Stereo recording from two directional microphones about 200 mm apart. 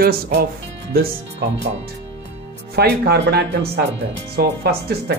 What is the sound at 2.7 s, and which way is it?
A woman's voice, 55° right (ahead or behind).